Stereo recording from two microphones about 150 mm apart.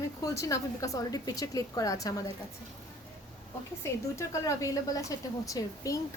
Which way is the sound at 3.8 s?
20° left (ahead or behind).